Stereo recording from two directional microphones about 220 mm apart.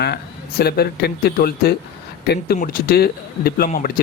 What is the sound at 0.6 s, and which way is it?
Speech, 45° left (ahead or behind).